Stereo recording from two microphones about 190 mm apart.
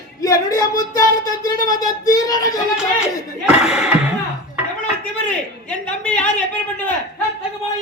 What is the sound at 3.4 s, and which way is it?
Speech, 5° right (ahead or behind).